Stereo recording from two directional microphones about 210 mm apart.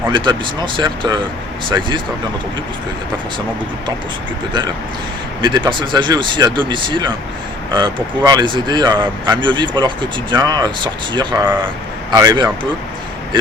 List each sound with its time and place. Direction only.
0.1 s speech: 20° right (ahead or behind)
5.4 s speech: 20° right (ahead or behind)